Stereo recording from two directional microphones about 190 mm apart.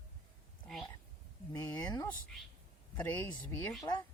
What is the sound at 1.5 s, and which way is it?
Speech, 20° left (ahead or behind).